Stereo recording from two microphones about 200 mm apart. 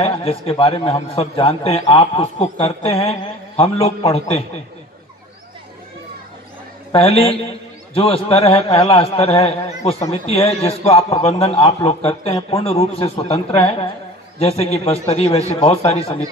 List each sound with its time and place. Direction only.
0.0 s a man's voice: 30° left (ahead or behind)
6.9 s a man's voice: 30° left (ahead or behind)